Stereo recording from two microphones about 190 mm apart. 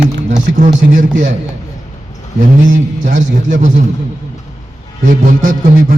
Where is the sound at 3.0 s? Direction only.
40° right (ahead or behind).